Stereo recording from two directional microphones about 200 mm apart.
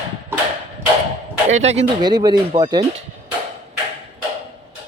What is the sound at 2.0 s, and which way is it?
Speech, 20° right (ahead or behind).